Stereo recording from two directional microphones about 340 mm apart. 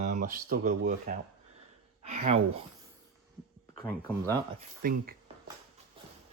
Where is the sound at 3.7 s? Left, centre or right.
Centre.